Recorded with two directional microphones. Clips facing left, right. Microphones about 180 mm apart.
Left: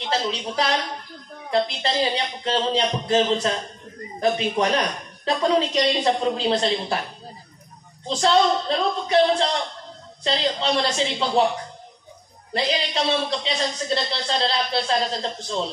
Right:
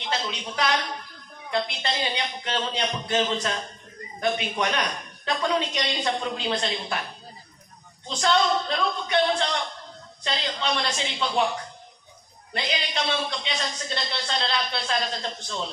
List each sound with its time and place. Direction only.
0.1 s speech: 35° left (ahead or behind)
8.1 s speech: 35° left (ahead or behind)
12.5 s speech: 35° left (ahead or behind)